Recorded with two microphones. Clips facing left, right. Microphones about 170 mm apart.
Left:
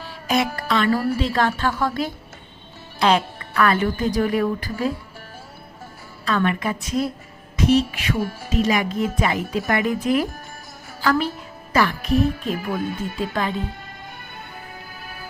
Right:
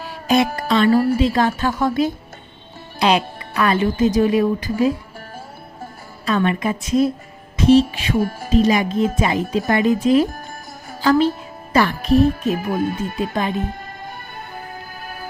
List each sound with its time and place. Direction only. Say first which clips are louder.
0.3 s a woman's voice: right 5 dB; 25° right (ahead or behind)
6.2 s speech: right 3 dB; 20° right (ahead or behind)
8.2 s speech: right 4 dB; 45° right (ahead or behind)
8.5 s speech: right 5 dB; 25° right (ahead or behind)
11.0 s a woman's voice: right 6 dB; 25° right (ahead or behind)
12.7 s speech: right 4 dB; 45° right (ahead or behind)
13.1 s speech: right 1 dB; 20° right (ahead or behind)
15.0 s music: right 6 dB; 45° right (ahead or behind)